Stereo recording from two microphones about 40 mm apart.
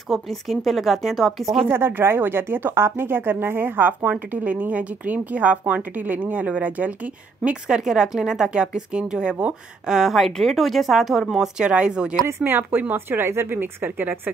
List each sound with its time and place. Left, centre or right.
0.1 s a woman's voice: centre
1.7 s speech: right
4.0 s speech: right
7.6 s speech: centre
10.3 s a woman's voice: centre
11.3 s speech: centre
12.4 s speech: right
12.9 s a woman's voice: right